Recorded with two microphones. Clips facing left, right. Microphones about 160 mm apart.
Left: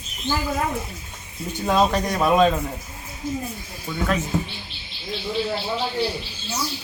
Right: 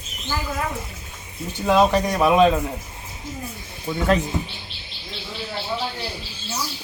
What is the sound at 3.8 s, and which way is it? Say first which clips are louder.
Speech: right 4 dB; 25° right (ahead or behind).